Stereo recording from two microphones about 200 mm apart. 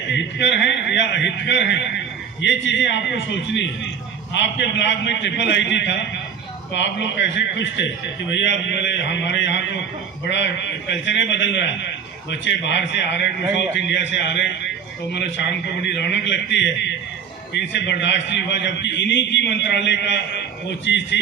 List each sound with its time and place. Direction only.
0.1 s a man's voice: 65° left (ahead or behind)